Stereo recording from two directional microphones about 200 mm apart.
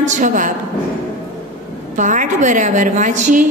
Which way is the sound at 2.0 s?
40° right (ahead or behind).